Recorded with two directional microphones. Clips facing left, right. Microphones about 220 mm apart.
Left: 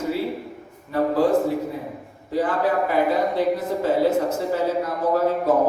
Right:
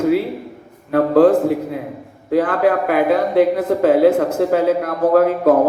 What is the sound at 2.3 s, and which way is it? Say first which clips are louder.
Speech: right 6 dB; 90° right.